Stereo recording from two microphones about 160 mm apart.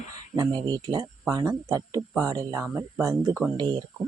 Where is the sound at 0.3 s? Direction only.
25° right (ahead or behind).